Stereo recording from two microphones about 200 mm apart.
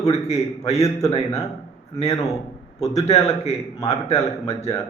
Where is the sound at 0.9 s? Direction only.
15° left (ahead or behind).